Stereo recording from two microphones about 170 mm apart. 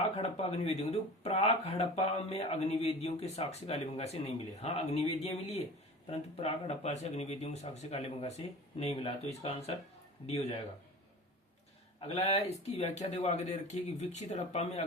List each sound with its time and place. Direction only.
0.2 s speech: 40° left (ahead or behind)
11.9 s speech: 35° left (ahead or behind)